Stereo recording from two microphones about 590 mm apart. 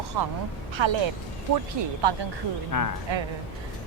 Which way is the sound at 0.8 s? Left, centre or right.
Right.